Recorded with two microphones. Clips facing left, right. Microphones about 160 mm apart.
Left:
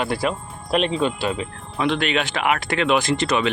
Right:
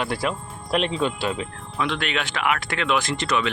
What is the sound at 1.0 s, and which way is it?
Speech, centre (ahead or behind).